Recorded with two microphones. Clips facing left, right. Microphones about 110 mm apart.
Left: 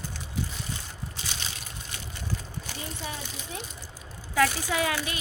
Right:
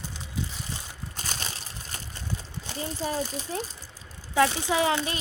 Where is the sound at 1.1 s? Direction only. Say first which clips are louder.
Right 4 dB; 45° right (ahead or behind).